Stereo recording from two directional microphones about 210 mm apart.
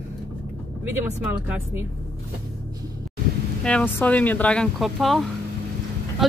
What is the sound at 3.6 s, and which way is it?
Speech, 5° left (ahead or behind).